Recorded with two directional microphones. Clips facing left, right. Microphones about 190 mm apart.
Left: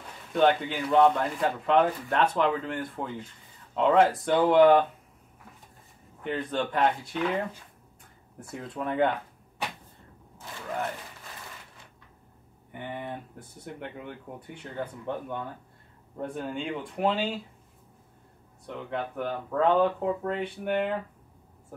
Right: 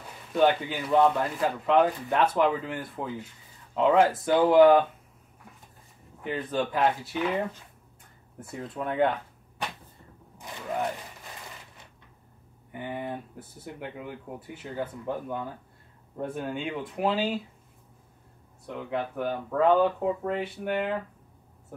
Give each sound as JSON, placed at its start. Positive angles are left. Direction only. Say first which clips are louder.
{"t": 0.3, "sound": "speech", "louder": "even", "side_deg": -5}
{"t": 6.2, "sound": "speech", "louder": "right 1 dB", "side_deg": -5}
{"t": 10.3, "sound": "a sound", "louder": "right 2 dB", "side_deg": -15}
{"t": 12.7, "sound": "speech", "louder": "right 2 dB", "side_deg": -5}
{"t": 18.7, "sound": "speech", "louder": "right 2 dB", "side_deg": -5}